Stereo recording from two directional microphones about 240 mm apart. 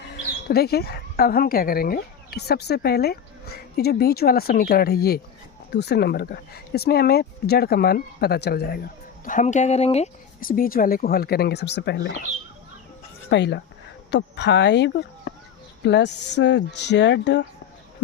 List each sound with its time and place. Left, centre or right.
0.4 s speech: left
13.3 s speech: left